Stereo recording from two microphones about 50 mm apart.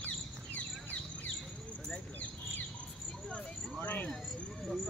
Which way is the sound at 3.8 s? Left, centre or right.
Left.